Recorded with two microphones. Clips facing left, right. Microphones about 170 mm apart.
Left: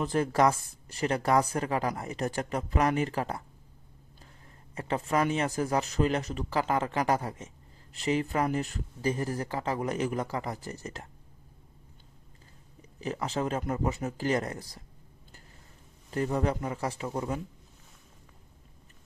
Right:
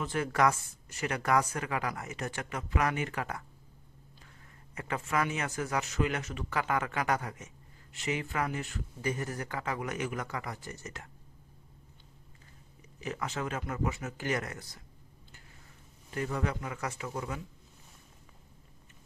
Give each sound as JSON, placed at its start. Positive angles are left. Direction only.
{"t": 0.0, "sound": "speech", "side_deg": 35}
{"t": 4.7, "sound": "speech", "side_deg": 30}
{"t": 13.0, "sound": "speech", "side_deg": 35}
{"t": 16.1, "sound": "speech", "side_deg": 35}